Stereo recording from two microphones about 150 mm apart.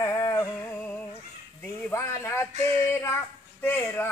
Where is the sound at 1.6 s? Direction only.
15° left (ahead or behind).